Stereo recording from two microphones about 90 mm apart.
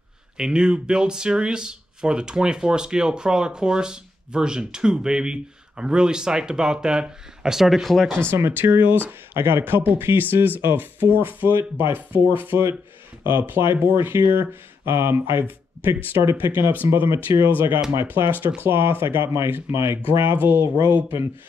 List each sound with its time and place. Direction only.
0.4 s speech: 10° right (ahead or behind)
8.3 s speech: 25° right (ahead or behind)